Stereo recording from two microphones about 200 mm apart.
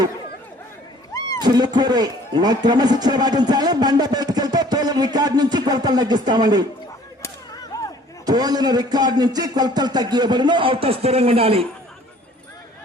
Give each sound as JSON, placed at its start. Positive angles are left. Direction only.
{"t": 1.4, "sound": "speech", "side_deg": -20}
{"t": 7.2, "sound": "whip", "side_deg": 20}
{"t": 8.3, "sound": "speech", "side_deg": -20}